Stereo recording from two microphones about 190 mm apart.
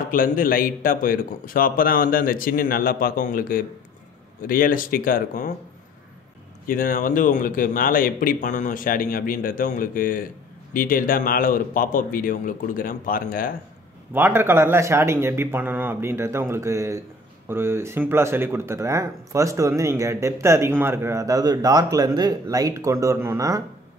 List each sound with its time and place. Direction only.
0.1 s speech: 45° left (ahead or behind)
6.7 s speech: 45° left (ahead or behind)
14.1 s speech: 10° right (ahead or behind)